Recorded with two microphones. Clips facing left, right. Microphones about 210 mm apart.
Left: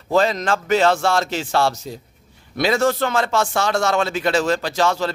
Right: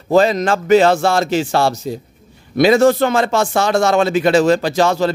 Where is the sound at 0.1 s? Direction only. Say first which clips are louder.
Right 5 dB; 10° right (ahead or behind).